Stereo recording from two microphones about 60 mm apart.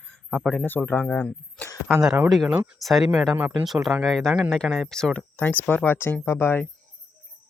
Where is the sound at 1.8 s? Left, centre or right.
Centre.